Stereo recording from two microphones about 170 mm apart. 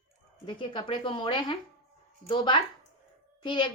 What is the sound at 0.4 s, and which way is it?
A woman's voice, 30° left (ahead or behind).